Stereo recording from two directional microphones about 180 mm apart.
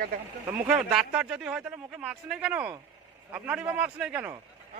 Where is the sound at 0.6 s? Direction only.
5° right (ahead or behind).